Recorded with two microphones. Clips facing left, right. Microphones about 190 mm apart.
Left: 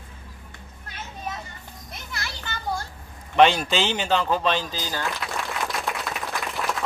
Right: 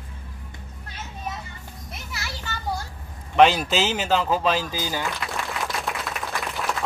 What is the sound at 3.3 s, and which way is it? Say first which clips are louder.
Speech: right 1 dB; centre (ahead or behind).